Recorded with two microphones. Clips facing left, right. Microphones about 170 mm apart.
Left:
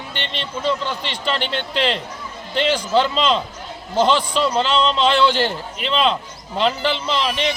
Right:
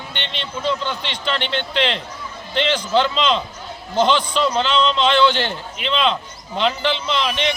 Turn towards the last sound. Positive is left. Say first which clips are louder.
# even
turn(degrees=5)  # may be behind; listen again after turning